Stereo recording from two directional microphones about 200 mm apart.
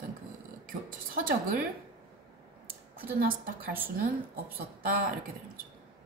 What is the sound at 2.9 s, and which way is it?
Speech, 45° right (ahead or behind).